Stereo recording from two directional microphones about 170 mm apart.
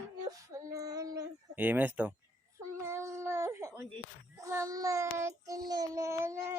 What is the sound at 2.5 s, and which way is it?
Child singing, 15° right (ahead or behind).